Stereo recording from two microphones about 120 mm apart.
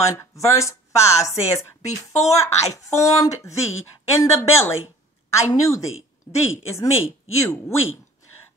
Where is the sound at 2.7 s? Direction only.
25° left (ahead or behind).